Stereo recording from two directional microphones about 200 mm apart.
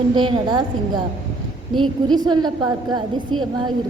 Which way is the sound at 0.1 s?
25° right (ahead or behind).